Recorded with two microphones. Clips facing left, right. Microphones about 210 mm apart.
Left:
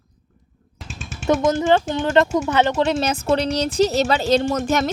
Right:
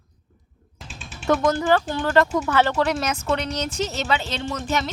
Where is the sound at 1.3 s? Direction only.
25° left (ahead or behind).